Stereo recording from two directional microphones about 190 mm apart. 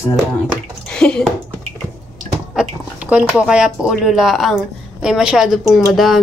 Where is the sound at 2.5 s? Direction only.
5° right (ahead or behind).